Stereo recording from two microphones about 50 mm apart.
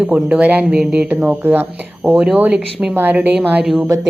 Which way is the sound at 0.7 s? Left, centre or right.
Right.